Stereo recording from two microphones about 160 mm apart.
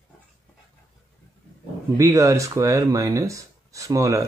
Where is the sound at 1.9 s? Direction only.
20° right (ahead or behind).